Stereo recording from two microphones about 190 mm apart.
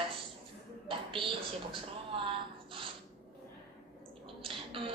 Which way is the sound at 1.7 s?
30° right (ahead or behind).